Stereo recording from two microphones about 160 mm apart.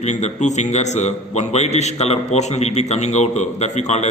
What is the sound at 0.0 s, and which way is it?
A man's voice, 45° left (ahead or behind).